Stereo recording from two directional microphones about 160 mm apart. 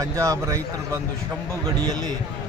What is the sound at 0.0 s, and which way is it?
Speech, 20° right (ahead or behind).